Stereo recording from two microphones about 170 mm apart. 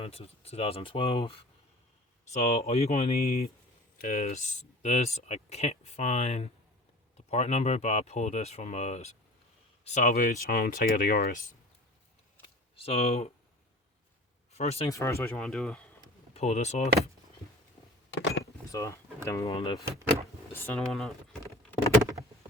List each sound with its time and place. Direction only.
0.0 s speech: 35° left (ahead or behind); by 11.5 s 55° left (ahead or behind)
12.7 s speech: 35° left (ahead or behind)
14.5 s speech: 40° left (ahead or behind)
14.8 s speech: 15° left (ahead or behind)
15.4 s speech: centre (ahead or behind)
16.3 s speech: 40° left (ahead or behind)
18.7 s speech: 20° left (ahead or behind)
19.5 s speech: 30° left (ahead or behind)
19.8 s speech: 15° right (ahead or behind)
20.5 s speech: 10° left (ahead or behind)